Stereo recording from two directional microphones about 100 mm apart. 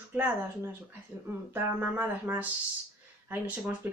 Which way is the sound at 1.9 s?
20° right (ahead or behind).